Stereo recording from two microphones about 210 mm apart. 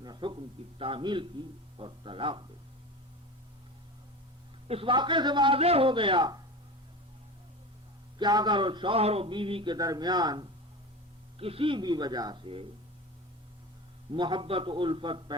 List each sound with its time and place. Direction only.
0.0 s a man's voice: 20° right (ahead or behind)
4.7 s a man's voice: 25° right (ahead or behind)
8.2 s a man's voice: 20° right (ahead or behind)
14.1 s a man's voice: 20° right (ahead or behind)